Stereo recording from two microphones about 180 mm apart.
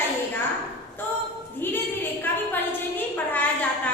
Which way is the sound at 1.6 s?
10° left (ahead or behind).